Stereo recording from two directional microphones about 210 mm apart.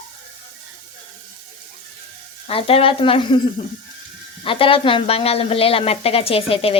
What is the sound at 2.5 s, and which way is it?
Speech, 25° left (ahead or behind).